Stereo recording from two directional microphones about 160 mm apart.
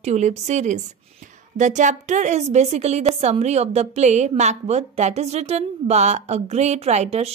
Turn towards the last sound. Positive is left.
turn(degrees=-40)  # may be behind; listen again after turning